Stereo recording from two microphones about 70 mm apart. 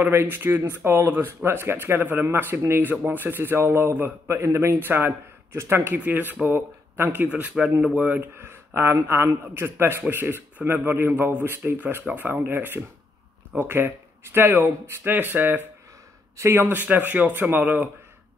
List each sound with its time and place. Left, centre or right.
0.0 s speech: right
4.3 s speech: right
5.9 s speech: right
7.6 s speech: centre
7.9 s speech: right
16.3 s speech: right